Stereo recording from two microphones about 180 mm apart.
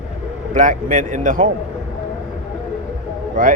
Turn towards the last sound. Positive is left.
turn(degrees=-45)  # may be behind; listen again after turning